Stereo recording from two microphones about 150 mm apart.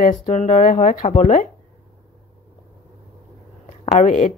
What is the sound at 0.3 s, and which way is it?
Speech, 45° left (ahead or behind).